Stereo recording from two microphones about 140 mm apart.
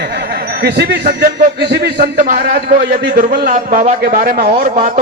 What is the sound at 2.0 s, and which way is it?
A man's voice, 85° right.